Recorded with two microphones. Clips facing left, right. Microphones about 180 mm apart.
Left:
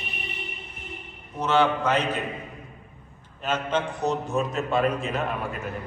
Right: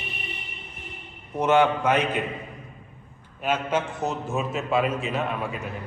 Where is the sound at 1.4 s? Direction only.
15° right (ahead or behind).